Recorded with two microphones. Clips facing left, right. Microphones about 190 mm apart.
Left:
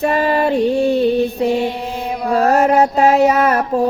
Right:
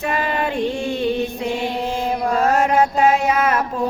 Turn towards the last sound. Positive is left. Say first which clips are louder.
# left 5 dB
turn(degrees=40)  # may be behind; listen again after turning